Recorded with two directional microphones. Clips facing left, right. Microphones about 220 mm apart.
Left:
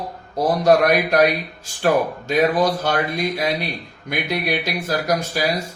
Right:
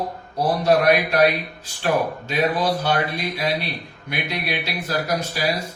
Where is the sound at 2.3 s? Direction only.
45° left (ahead or behind).